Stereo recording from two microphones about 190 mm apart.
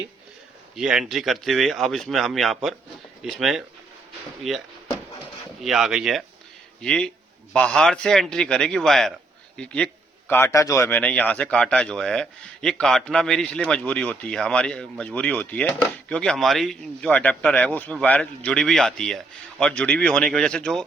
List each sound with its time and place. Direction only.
0.8 s a man's voice: 5° right (ahead or behind)
5.6 s a man's voice: centre (ahead or behind)